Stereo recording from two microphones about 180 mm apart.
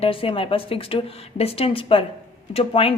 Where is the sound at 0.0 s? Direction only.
30° left (ahead or behind).